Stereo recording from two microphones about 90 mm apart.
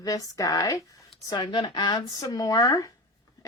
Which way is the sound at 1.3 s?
55° left (ahead or behind).